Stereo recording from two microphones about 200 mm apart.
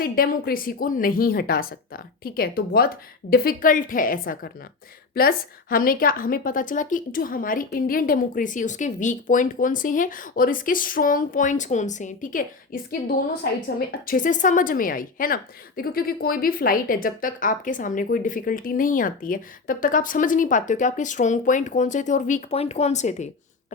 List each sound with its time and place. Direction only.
0.0 s a woman's voice: 45° left (ahead or behind)